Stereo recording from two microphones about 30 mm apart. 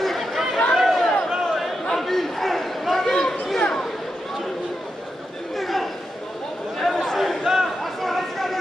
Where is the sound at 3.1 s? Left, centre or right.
Centre.